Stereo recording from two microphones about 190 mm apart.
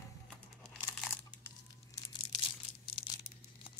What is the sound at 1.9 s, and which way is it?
Crumpling, 20° left (ahead or behind).